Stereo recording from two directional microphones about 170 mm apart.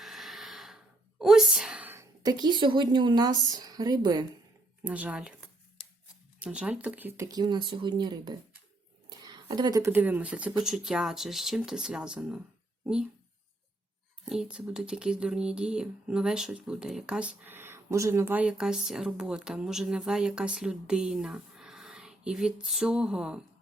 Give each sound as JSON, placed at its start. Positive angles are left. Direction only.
{"t": 0.0, "sound": "gasp", "side_deg": 0}
{"t": 1.2, "sound": "a woman's voice", "side_deg": 0}
{"t": 2.2, "sound": "speech", "side_deg": -25}
{"t": 4.8, "sound": "speech", "side_deg": -10}
{"t": 6.4, "sound": "speech", "side_deg": -5}
{"t": 14.3, "sound": "speech", "side_deg": -5}